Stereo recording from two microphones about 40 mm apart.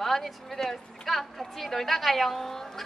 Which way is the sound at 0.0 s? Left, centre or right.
Centre.